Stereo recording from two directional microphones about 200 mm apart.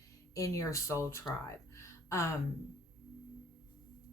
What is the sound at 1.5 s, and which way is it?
Music, 15° left (ahead or behind).